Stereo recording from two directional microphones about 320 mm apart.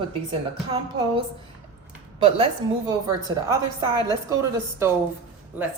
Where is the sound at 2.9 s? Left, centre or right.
Centre.